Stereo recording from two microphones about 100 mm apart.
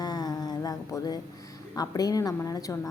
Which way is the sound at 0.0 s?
40° left (ahead or behind).